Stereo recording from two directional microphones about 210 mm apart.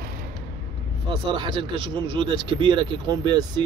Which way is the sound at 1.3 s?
20° right (ahead or behind).